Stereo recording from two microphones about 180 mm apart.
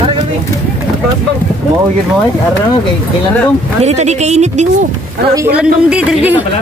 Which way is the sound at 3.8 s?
40° right (ahead or behind).